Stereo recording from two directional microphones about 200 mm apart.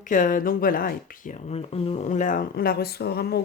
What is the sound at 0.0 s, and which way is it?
Speech, 40° left (ahead or behind).